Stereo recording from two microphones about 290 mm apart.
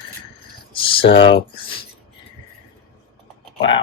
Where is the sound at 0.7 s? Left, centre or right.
Centre.